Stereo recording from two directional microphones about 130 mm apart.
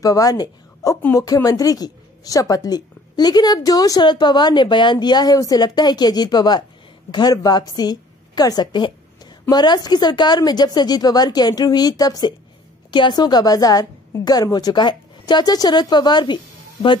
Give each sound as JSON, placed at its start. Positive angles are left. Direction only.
{"t": 0.0, "sound": "a woman's voice", "side_deg": 25}